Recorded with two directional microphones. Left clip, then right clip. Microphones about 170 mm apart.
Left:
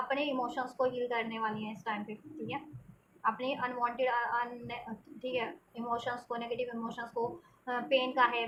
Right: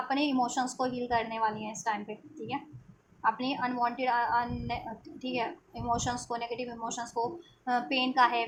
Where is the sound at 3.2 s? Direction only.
50° right (ahead or behind).